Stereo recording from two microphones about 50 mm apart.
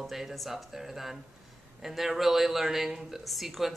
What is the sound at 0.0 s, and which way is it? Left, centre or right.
Speech, centre.